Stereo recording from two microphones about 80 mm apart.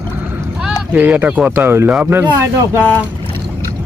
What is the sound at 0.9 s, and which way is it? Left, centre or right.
Speech, centre.